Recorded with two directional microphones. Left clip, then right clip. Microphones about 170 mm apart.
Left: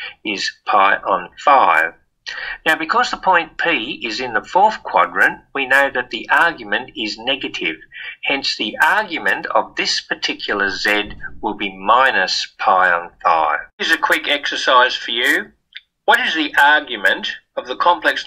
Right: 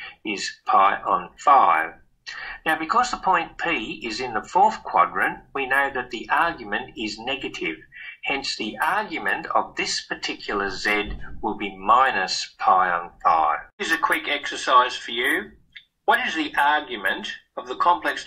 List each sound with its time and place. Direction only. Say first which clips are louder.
0.0 s speech: left 7 dB; 30° left (ahead or behind)